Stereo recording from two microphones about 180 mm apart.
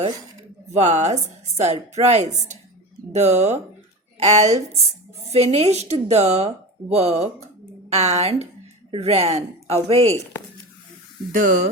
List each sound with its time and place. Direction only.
0.8 s speech: 40° right (ahead or behind)
11.3 s speech: 45° right (ahead or behind)